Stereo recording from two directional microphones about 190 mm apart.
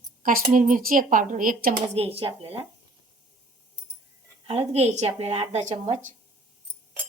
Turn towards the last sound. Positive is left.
turn(degrees=-35)  # may be behind; listen again after turning